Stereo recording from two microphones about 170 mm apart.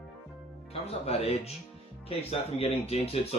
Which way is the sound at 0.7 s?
35° left (ahead or behind).